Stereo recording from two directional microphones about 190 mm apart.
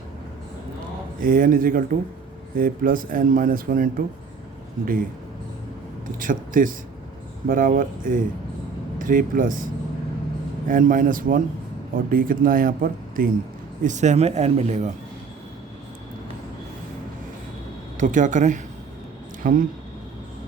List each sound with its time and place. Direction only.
1.2 s speech: 50° right (ahead or behind)
6.1 s speech: 45° right (ahead or behind)
10.7 s speech: 45° right (ahead or behind)
18.0 s speech: 40° right (ahead or behind)